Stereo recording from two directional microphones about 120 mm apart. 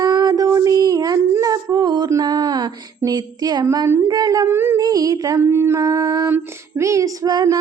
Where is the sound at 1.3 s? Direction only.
30° right (ahead or behind).